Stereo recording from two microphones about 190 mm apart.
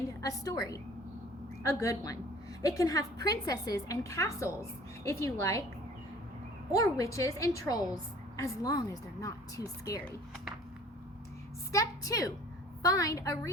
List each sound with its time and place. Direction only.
0.2 s a woman's voice: 20° left (ahead or behind)
6.7 s a woman's voice: 15° left (ahead or behind)
11.7 s a woman's voice: 15° left (ahead or behind)